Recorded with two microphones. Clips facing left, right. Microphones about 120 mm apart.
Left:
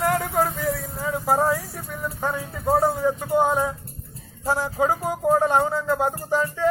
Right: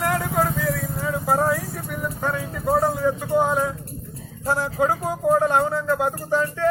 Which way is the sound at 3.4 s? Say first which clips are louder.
Even; 20° left (ahead or behind).